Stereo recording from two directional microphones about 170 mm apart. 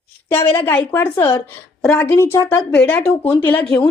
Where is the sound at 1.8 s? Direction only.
5° left (ahead or behind).